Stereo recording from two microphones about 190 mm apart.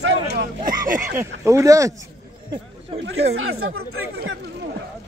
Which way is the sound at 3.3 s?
90° right.